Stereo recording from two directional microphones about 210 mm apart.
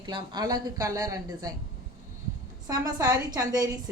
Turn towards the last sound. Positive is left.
turn(degrees=-15)  # may be behind; listen again after turning